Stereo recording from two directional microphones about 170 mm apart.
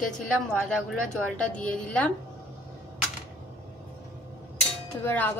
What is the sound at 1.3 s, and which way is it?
Speech, 5° left (ahead or behind).